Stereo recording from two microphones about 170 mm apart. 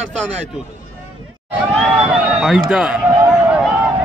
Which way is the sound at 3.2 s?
5° right (ahead or behind).